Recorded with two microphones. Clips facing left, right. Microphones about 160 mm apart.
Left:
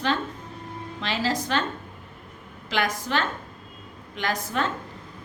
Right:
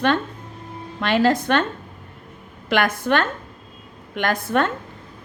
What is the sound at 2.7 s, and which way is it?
A woman's voice, 55° right (ahead or behind).